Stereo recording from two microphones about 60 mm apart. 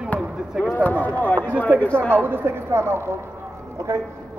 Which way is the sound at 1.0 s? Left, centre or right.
Left.